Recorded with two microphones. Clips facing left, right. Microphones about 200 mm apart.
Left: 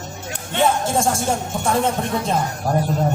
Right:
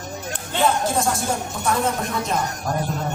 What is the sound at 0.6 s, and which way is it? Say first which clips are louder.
A man's voice: left 2 dB; 25° left (ahead or behind).